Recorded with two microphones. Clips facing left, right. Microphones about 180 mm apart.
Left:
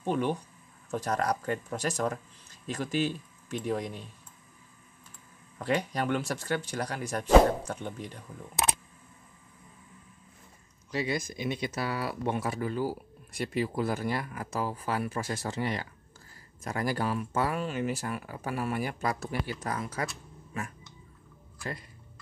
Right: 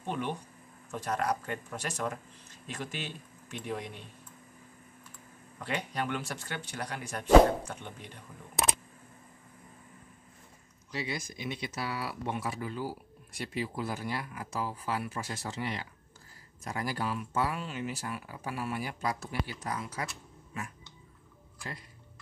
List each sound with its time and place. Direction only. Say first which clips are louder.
0.0 s speech: left 6 dB; 40° left (ahead or behind)
5.6 s speech: left 5 dB; 40° left (ahead or behind)
10.9 s speech: left 6 dB; 45° left (ahead or behind)